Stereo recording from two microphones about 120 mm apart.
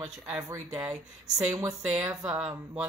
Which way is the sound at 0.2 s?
25° right (ahead or behind).